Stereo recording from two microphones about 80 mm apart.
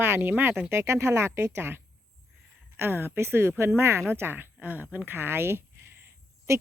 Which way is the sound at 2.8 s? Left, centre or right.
Right.